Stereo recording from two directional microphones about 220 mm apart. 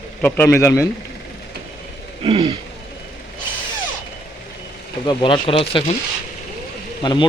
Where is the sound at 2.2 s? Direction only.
25° right (ahead or behind).